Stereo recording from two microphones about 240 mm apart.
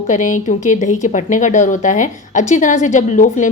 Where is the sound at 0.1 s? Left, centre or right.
Left.